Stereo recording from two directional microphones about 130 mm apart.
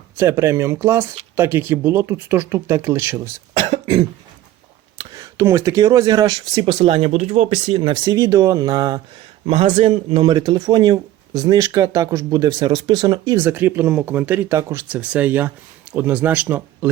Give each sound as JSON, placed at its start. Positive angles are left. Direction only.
{"t": 0.2, "sound": "speech", "side_deg": -20}
{"t": 3.5, "sound": "cough", "side_deg": -40}
{"t": 4.9, "sound": "speech", "side_deg": -25}
{"t": 8.0, "sound": "speech", "side_deg": -25}
{"t": 9.5, "sound": "speech", "side_deg": -45}
{"t": 13.3, "sound": "speech", "side_deg": -15}